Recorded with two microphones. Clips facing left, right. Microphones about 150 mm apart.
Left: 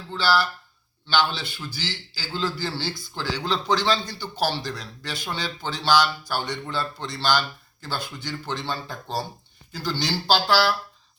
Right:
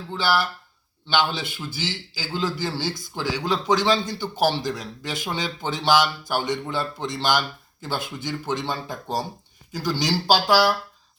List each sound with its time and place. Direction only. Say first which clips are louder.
0.1 s a man's voice: even; 20° right (ahead or behind)